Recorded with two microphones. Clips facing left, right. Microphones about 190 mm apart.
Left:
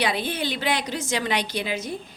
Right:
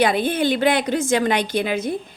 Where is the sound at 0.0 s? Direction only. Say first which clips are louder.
Right 7 dB; 50° right (ahead or behind).